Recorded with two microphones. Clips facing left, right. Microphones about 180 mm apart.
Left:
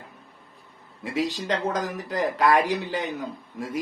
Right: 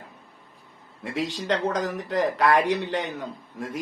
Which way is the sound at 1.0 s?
Centre (ahead or behind).